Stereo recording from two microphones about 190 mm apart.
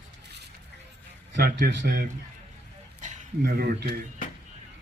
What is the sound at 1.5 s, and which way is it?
Speech, 65° right (ahead or behind).